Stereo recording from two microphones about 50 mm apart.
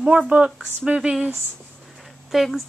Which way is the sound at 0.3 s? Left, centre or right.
Right.